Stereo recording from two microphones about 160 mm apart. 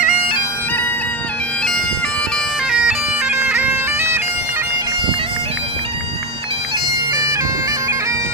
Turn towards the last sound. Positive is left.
turn(degrees=-20)  # may be behind; listen again after turning